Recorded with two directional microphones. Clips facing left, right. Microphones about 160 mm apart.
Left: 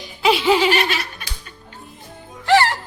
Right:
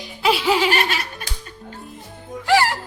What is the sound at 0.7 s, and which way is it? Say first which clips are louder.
Laughter: left 2 dB; 45° right (ahead or behind).